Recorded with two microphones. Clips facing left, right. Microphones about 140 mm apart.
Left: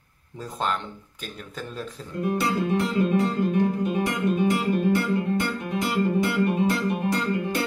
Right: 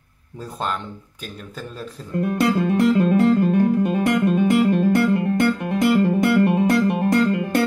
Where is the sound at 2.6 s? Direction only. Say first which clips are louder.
Right 7 dB; 55° right (ahead or behind).